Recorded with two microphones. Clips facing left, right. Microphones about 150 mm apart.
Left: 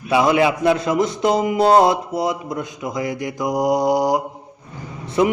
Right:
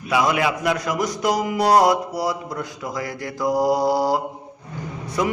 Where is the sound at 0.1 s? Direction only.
25° left (ahead or behind).